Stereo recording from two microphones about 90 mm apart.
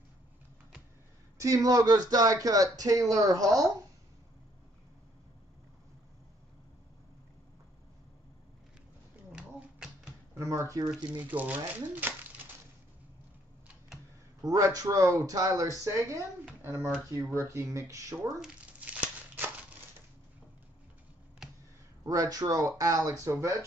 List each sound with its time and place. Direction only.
1.4 s speech: 40° right (ahead or behind)
9.3 s typewriter: 10° right (ahead or behind)
10.3 s speech: 35° right (ahead or behind)
11.1 s speech: 15° right (ahead or behind)
14.4 s speech: 45° right (ahead or behind)
18.4 s crumpling: 15° right (ahead or behind)
22.0 s speech: 40° right (ahead or behind)